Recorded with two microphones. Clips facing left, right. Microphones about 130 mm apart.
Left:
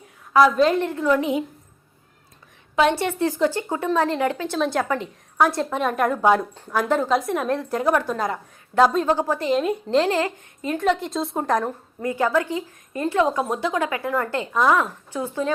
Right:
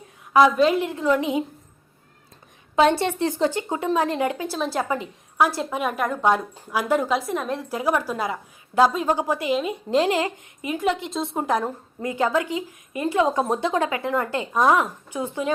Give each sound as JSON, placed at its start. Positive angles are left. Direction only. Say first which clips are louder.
{"t": 0.3, "sound": "a woman's voice", "louder": "even", "side_deg": -15}
{"t": 0.9, "sound": "a woman's voice", "louder": "left 1 dB", "side_deg": -20}
{"t": 2.7, "sound": "a woman's voice", "louder": "right 1 dB", "side_deg": -30}
{"t": 4.5, "sound": "a woman's voice", "louder": "left 2 dB", "side_deg": -5}
{"t": 12.0, "sound": "a woman's voice", "louder": "left 1 dB", "side_deg": -20}